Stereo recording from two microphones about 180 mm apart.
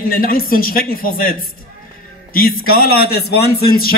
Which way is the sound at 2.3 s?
55° left (ahead or behind).